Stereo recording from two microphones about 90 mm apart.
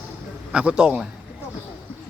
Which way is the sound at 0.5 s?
10° right (ahead or behind).